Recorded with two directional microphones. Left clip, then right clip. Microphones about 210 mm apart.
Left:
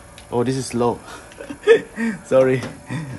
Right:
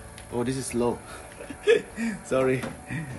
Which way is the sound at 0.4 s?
30° left (ahead or behind).